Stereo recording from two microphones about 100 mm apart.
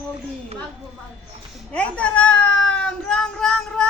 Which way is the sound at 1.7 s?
15° left (ahead or behind).